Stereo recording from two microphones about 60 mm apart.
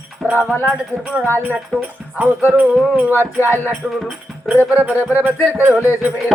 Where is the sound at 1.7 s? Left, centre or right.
Centre.